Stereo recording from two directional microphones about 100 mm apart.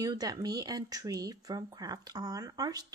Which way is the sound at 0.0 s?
40° right (ahead or behind).